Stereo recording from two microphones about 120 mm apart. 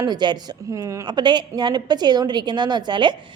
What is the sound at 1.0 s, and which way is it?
A woman's voice, 40° right (ahead or behind).